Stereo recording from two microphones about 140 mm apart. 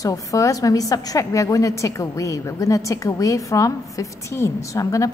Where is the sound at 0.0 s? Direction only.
25° left (ahead or behind).